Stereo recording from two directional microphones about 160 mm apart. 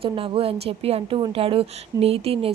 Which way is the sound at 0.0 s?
35° right (ahead or behind).